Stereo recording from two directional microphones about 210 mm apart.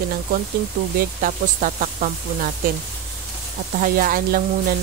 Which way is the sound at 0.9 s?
40° right (ahead or behind).